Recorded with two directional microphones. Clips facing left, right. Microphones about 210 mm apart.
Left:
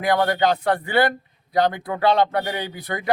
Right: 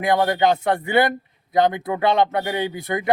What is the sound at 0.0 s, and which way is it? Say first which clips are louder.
A man's voice: right 1 dB; 25° right (ahead or behind).